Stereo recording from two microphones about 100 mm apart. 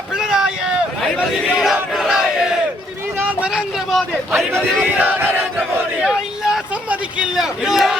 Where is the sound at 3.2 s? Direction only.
15° right (ahead or behind).